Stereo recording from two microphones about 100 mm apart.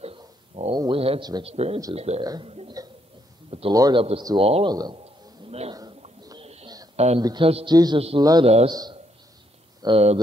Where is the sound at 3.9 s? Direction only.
60° right (ahead or behind).